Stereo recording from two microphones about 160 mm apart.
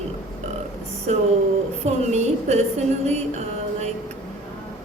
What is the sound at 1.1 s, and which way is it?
A man's voice, 45° right (ahead or behind).